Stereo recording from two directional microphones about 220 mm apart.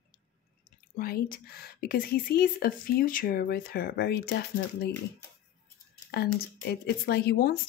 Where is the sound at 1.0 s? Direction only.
45° left (ahead or behind).